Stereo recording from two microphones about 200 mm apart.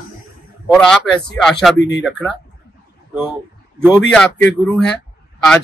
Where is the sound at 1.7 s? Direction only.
60° left (ahead or behind).